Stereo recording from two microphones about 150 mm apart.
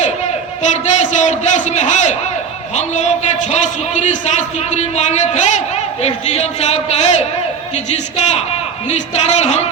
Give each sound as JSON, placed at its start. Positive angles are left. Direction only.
{"t": 0.6, "sound": "a man's voice", "side_deg": 55}